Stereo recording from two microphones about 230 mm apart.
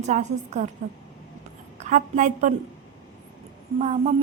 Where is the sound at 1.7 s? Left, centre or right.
Right.